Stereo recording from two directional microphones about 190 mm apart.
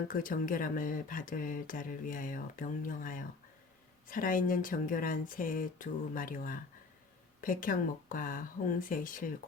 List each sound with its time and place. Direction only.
0.1 s speech: 45° left (ahead or behind)